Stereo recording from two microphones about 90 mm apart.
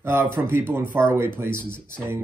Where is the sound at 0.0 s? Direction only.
25° right (ahead or behind).